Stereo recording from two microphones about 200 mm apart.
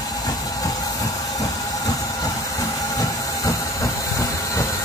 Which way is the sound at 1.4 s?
15° left (ahead or behind).